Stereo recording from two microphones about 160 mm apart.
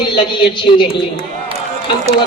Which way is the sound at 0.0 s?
30° left (ahead or behind).